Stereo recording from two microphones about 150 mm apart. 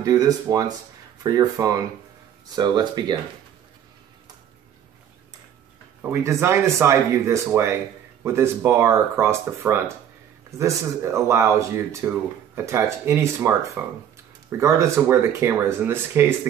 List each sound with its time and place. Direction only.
0.0 s speech: 25° right (ahead or behind)
6.0 s speech: 15° right (ahead or behind)